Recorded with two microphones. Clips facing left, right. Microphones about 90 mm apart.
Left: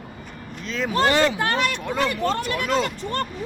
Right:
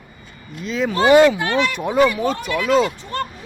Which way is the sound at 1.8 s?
10° right (ahead or behind).